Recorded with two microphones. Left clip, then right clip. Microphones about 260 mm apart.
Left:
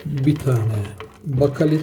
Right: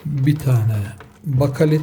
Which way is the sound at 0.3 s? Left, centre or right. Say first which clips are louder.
Left 2 dB; centre.